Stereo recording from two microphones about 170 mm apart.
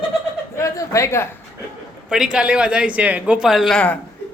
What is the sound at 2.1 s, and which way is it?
A man's voice, 5° right (ahead or behind).